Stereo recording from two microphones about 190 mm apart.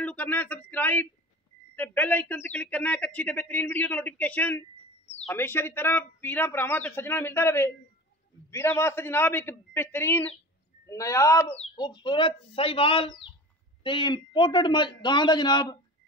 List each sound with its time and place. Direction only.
0.0 s a man's voice: 10° left (ahead or behind)
11.4 s a man's voice: 30° left (ahead or behind)